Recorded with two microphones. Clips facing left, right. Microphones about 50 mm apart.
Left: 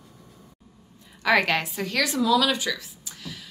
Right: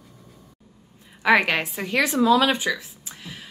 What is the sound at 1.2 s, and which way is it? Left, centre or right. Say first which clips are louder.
A woman's voice: right 2 dB; centre.